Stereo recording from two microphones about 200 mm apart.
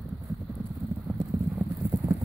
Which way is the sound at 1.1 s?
15° right (ahead or behind).